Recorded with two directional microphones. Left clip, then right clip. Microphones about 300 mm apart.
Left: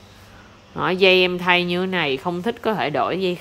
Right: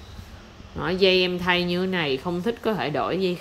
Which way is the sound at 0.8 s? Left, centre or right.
Centre.